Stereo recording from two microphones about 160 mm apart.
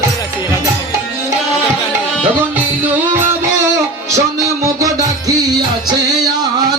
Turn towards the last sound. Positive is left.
turn(degrees=-20)  # may be behind; listen again after turning